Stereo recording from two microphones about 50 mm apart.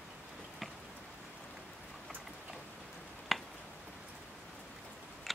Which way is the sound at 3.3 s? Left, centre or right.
Centre.